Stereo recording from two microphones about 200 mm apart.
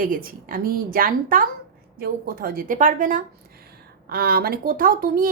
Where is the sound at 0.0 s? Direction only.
45° right (ahead or behind).